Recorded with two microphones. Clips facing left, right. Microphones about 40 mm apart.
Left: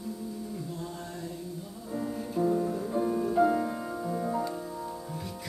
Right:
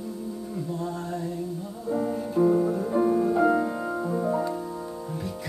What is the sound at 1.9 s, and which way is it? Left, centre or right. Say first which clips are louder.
Music: right 7 dB; right.